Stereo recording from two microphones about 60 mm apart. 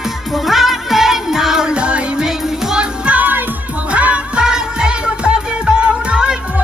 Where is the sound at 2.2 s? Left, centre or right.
Centre.